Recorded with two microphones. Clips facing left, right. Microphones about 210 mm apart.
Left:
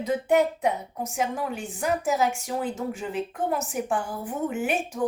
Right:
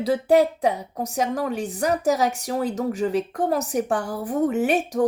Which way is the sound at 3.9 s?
70° right (ahead or behind).